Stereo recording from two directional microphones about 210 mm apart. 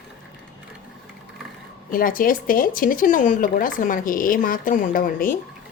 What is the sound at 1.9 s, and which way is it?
A woman's voice, 40° left (ahead or behind).